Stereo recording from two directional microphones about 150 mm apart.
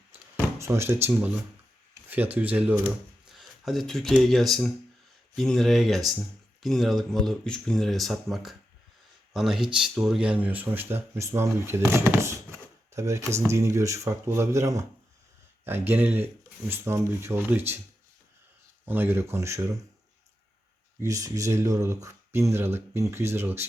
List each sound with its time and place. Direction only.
0.6 s speech: 15° right (ahead or behind)
2.0 s speech: 10° right (ahead or behind)
15.9 s speech: 15° right (ahead or behind)
18.9 s speech: 15° right (ahead or behind)
21.0 s speech: 20° right (ahead or behind)